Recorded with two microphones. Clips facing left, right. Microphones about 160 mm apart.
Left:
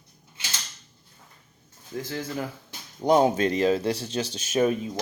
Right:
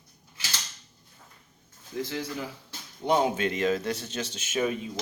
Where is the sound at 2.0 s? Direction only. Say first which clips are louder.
Left 2 dB; 45° left (ahead or behind).